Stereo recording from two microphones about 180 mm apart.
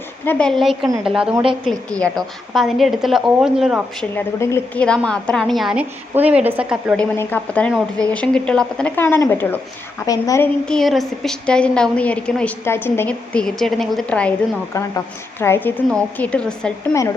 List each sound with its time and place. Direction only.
0.3 s a woman's voice: 5° left (ahead or behind)
4.1 s a woman's voice: 15° left (ahead or behind); by 6.9 s 10° right (ahead or behind)
6.9 s a woman's voice: 10° left (ahead or behind)
10.7 s a woman's voice: centre (ahead or behind)